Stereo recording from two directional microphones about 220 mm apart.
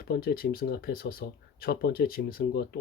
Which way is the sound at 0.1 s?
45° left (ahead or behind).